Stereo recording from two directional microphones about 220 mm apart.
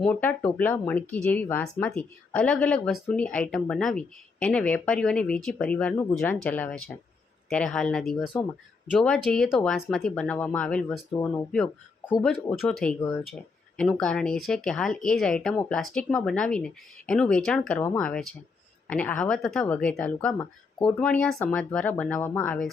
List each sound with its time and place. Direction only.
0.0 s speech: 5° left (ahead or behind)